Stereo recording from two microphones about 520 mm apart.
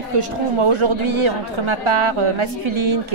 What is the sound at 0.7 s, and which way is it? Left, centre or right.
A woman's voice, right.